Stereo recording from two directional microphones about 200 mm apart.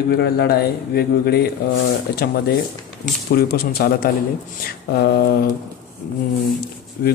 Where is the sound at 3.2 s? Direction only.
50° left (ahead or behind).